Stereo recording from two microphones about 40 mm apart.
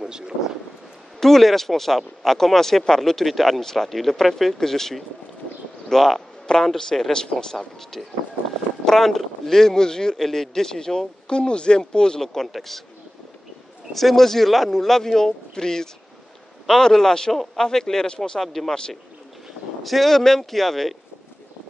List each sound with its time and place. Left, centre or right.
1.2 s a man's voice: centre
12.4 s a man's voice: centre
13.9 s a man's voice: centre
18.5 s a man's voice: centre
19.8 s a man's voice: centre